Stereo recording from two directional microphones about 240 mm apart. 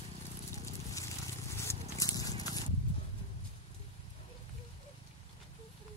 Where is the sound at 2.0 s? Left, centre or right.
Centre.